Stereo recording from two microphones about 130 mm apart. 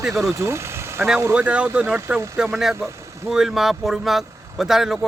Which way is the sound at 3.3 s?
5° right (ahead or behind).